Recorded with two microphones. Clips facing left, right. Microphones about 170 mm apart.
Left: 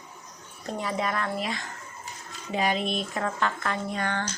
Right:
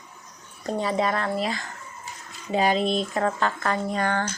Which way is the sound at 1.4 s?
35° right (ahead or behind).